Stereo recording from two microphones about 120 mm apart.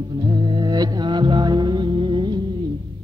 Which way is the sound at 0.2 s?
40° right (ahead or behind).